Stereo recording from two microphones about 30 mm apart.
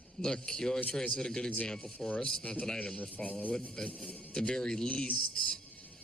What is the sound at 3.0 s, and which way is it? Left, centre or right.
Speech, left.